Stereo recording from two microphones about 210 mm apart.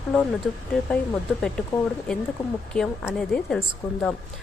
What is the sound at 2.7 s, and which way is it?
Speech, centre (ahead or behind).